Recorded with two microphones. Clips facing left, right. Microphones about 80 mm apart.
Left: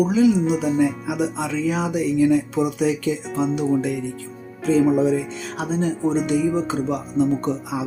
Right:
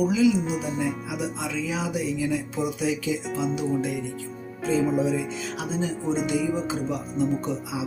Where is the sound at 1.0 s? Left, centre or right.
Left.